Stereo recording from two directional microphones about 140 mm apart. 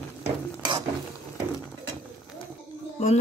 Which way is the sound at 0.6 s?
30° right (ahead or behind).